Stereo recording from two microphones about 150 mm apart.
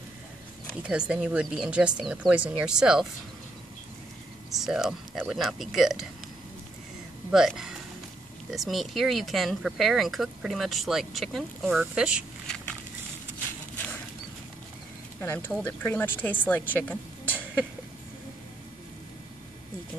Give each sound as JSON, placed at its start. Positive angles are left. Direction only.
{"t": 0.8, "sound": "speech", "side_deg": -10}
{"t": 4.5, "sound": "speech", "side_deg": 0}
{"t": 7.2, "sound": "speech", "side_deg": -5}
{"t": 15.1, "sound": "speech", "side_deg": 15}